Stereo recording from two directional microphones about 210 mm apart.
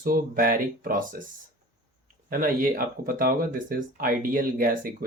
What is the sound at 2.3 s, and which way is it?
Speech, 45° right (ahead or behind).